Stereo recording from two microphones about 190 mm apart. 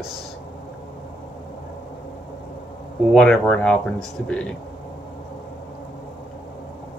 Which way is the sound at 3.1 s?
5° left (ahead or behind).